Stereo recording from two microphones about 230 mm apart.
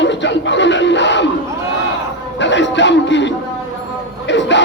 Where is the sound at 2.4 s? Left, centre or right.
Left.